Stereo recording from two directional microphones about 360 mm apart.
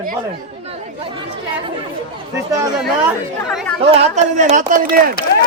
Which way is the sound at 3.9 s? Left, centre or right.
Centre.